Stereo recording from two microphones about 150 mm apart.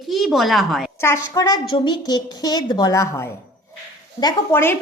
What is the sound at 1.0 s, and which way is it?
A woman's voice, 20° left (ahead or behind).